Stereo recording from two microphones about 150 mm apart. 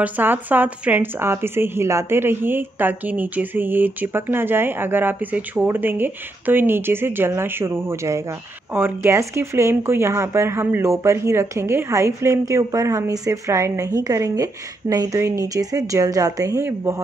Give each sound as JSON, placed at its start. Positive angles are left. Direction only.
{"t": 0.0, "sound": "a woman's voice", "side_deg": -10}